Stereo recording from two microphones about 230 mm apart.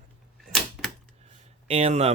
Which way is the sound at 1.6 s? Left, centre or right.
Right.